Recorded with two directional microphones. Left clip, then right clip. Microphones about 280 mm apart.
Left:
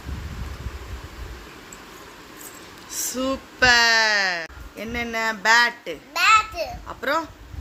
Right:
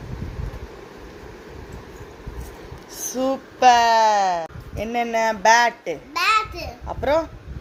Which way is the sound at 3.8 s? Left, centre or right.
Centre.